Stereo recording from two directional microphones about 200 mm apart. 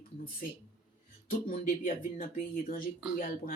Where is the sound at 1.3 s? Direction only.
40° left (ahead or behind).